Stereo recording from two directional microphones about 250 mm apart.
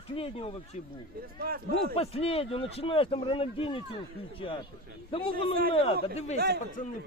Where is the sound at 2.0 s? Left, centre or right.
Left.